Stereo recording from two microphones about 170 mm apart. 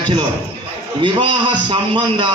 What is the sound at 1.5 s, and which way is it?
Speech, 30° right (ahead or behind).